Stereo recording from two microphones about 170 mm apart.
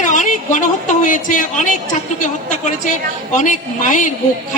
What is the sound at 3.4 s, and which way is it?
Speech, 50° left (ahead or behind).